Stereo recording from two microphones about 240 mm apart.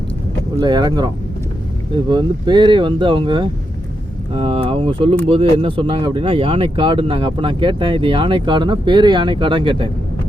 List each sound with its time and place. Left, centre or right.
0.6 s speech: centre